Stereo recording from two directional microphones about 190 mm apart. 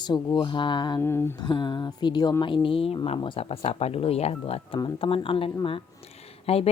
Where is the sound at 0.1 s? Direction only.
25° left (ahead or behind).